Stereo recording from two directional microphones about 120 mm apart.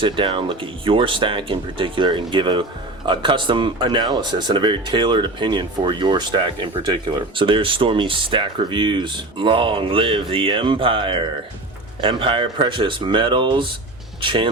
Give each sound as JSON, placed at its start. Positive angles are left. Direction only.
{"t": 0.0, "sound": "speech", "side_deg": -45}